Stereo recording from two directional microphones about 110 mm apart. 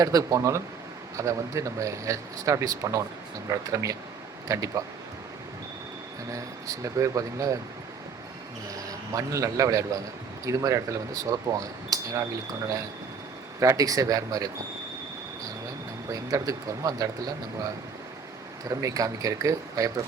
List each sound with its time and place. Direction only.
0.0 s speech: 30° right (ahead or behind)
6.3 s speech: 30° right (ahead or behind)
9.1 s speech: 30° right (ahead or behind)
13.6 s speech: 30° right (ahead or behind)
16.1 s speech: 30° right (ahead or behind)
18.7 s speech: 30° right (ahead or behind)